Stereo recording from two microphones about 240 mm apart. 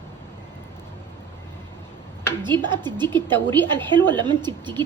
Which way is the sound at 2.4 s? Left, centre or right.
Centre.